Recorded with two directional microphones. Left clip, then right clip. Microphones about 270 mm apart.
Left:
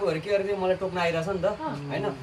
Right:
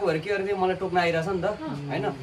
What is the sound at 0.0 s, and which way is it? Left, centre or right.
Speech, centre.